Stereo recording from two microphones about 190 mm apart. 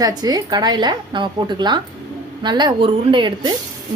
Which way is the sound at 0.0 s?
20° right (ahead or behind).